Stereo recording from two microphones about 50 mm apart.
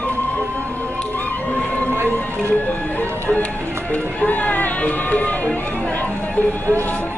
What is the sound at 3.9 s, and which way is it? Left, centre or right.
Speech, left.